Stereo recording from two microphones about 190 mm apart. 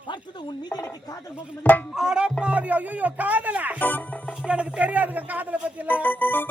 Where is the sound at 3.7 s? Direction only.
10° left (ahead or behind).